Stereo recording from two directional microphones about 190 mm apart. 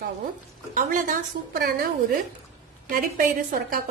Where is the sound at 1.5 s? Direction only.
55° right (ahead or behind).